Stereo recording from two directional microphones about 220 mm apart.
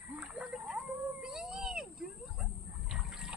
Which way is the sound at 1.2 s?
Centre (ahead or behind).